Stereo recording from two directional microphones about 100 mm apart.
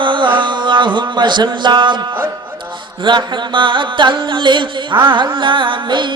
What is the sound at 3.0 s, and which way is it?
Music, 50° right (ahead or behind).